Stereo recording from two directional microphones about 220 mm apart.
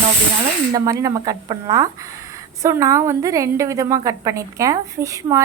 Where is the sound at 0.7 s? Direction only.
15° right (ahead or behind).